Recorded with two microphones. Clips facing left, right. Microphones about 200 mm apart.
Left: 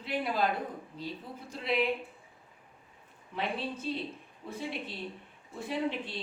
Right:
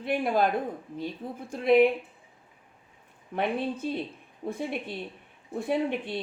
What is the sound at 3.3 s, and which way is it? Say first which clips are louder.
Speech: right 6 dB; 55° right (ahead or behind).